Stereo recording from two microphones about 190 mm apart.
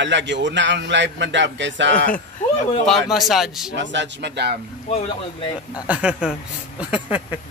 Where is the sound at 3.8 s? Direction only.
65° right (ahead or behind).